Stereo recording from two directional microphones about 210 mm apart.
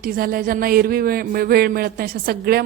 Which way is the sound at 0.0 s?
45° right (ahead or behind).